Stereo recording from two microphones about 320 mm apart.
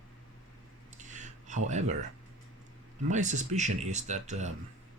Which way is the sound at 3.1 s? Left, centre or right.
Right.